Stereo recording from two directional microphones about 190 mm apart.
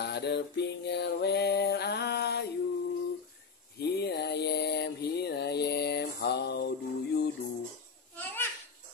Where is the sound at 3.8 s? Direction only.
60° left (ahead or behind).